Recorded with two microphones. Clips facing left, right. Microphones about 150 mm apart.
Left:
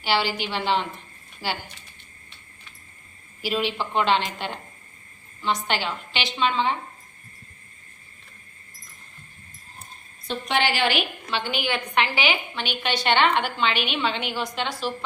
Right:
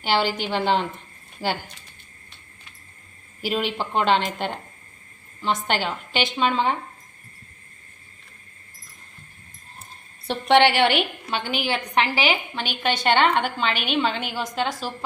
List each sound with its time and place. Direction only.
0.0 s a woman's voice: 45° right (ahead or behind)
3.4 s a woman's voice: 45° right (ahead or behind)
10.2 s a woman's voice: 65° right (ahead or behind)
11.6 s a woman's voice: 35° right (ahead or behind)